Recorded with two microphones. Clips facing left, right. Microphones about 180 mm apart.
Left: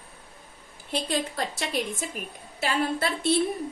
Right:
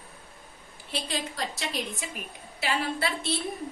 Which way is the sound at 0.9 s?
55° left (ahead or behind).